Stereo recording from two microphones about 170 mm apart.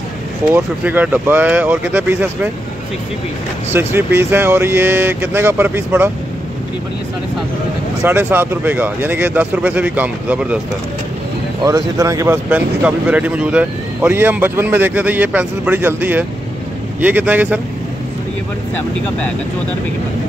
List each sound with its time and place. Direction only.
0.6 s speech: 10° right (ahead or behind)
3.7 s speech: 15° right (ahead or behind)
8.0 s speech: 15° right (ahead or behind)
11.6 s speech: 20° right (ahead or behind)
12.4 s speech: 10° right (ahead or behind)